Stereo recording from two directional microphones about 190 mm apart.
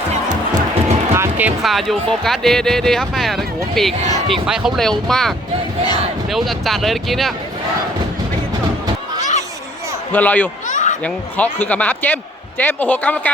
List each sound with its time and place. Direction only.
1.1 s speech: 10° right (ahead or behind)
6.3 s speech: centre (ahead or behind)
10.1 s speech: 10° left (ahead or behind)
10.7 s a sound: 40° left (ahead or behind)
11.0 s speech: 10° left (ahead or behind)